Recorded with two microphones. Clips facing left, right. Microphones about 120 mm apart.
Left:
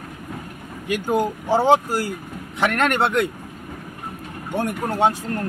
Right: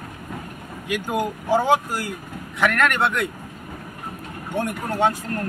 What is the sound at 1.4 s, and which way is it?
Speech, 35° left (ahead or behind).